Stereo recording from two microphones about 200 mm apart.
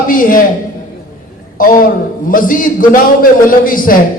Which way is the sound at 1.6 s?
45° left (ahead or behind).